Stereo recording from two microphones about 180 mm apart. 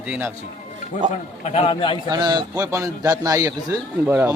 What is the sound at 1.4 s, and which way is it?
Speech, 35° left (ahead or behind).